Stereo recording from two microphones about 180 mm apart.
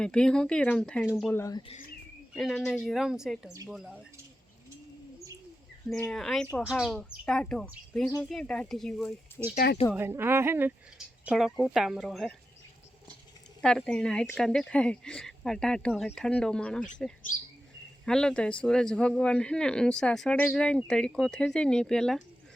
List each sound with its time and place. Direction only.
0.0 s a man's voice: 5° left (ahead or behind)
1.4 s speech: 20° left (ahead or behind)
2.3 s a man's voice: centre (ahead or behind)
5.9 s a man's voice: 5° left (ahead or behind)
9.9 s a man's voice: 15° right (ahead or behind)
13.6 s a man's voice: 5° left (ahead or behind)
18.0 s a man's voice: 5° left (ahead or behind)